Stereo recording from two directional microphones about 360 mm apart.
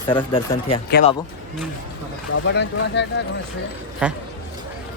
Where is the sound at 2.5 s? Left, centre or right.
Left.